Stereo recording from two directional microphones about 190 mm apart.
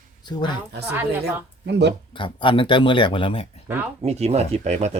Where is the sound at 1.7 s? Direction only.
65° right (ahead or behind).